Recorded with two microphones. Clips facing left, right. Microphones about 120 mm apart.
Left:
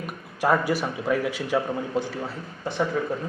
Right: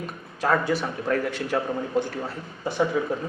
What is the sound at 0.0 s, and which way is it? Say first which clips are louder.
A man's voice: left 2 dB; 10° left (ahead or behind).